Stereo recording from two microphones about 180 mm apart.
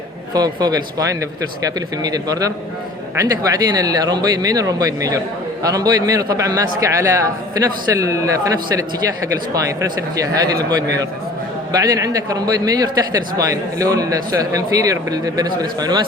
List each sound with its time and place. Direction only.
0.3 s a man's voice: 20° right (ahead or behind)